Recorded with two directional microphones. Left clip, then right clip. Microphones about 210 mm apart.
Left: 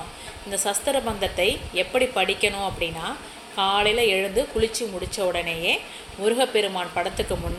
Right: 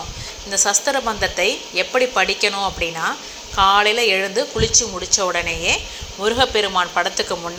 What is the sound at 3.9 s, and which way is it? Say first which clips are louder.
Speech: right 4 dB; 35° right (ahead or behind).